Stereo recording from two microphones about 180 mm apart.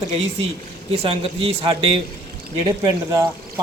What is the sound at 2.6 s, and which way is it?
Speech, 20° right (ahead or behind).